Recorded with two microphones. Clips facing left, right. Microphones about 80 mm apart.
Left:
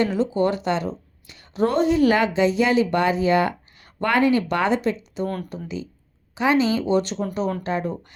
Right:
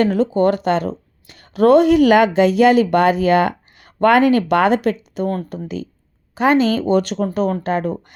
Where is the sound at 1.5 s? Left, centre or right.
Right.